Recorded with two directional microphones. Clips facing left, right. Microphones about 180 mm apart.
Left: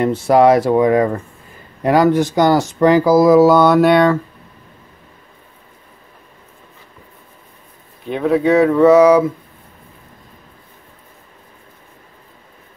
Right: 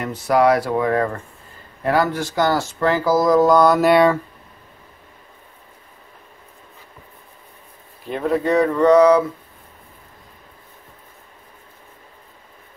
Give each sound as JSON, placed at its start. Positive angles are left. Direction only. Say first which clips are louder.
{"t": 0.0, "sound": "speech", "louder": "left 5 dB", "side_deg": 25}
{"t": 8.0, "sound": "speech", "louder": "left 5 dB", "side_deg": 0}